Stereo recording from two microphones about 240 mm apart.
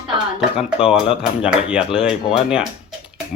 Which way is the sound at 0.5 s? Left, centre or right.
Centre.